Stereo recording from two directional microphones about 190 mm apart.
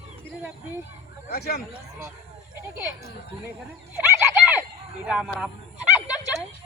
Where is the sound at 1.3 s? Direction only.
55° left (ahead or behind).